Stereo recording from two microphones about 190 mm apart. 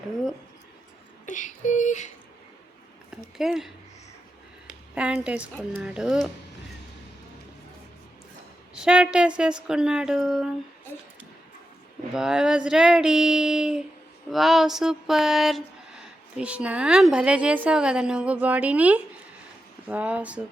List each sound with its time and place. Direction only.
1.3 s speech: 40° left (ahead or behind)
3.3 s speech: centre (ahead or behind)
4.9 s a woman's voice: 5° right (ahead or behind)
8.7 s speech: 5° right (ahead or behind)
12.1 s a woman's voice: 5° right (ahead or behind)